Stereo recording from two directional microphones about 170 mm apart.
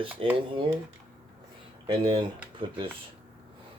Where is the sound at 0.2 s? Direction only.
35° right (ahead or behind).